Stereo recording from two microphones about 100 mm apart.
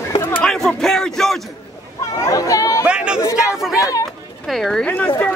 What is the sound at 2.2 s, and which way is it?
Chatter, 35° left (ahead or behind).